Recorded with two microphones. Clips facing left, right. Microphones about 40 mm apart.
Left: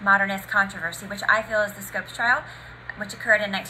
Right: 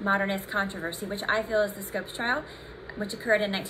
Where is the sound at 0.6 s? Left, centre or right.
Left.